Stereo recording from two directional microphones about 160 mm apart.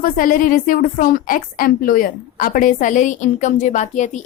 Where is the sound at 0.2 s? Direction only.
60° left (ahead or behind).